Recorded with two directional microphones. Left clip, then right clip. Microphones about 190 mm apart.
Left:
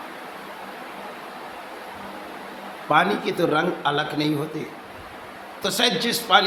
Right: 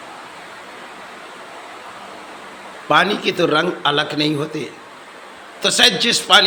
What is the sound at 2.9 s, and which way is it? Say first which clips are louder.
A man's voice: right 4 dB; 10° right (ahead or behind).